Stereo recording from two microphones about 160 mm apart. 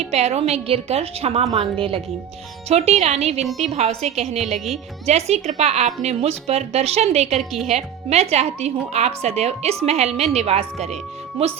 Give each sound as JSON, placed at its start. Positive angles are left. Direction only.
{"t": 0.0, "sound": "a woman's voice", "side_deg": -40}
{"t": 7.3, "sound": "a woman's voice", "side_deg": 0}
{"t": 8.1, "sound": "a woman's voice", "side_deg": -40}